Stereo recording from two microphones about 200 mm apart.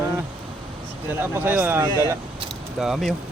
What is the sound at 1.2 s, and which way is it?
Speech, 10° right (ahead or behind).